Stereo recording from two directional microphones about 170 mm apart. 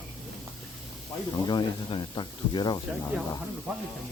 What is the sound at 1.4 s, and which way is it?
Speech, 25° left (ahead or behind).